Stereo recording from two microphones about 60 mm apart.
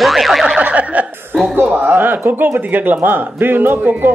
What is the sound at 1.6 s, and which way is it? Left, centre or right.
Speech, right.